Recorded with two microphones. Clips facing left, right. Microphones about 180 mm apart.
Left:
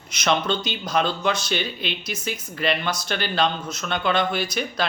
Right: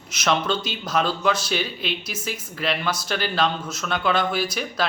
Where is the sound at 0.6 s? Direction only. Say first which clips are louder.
Left 1 dB; 5° right (ahead or behind).